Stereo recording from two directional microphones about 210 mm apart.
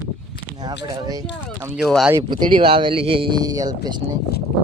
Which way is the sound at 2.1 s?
20° right (ahead or behind).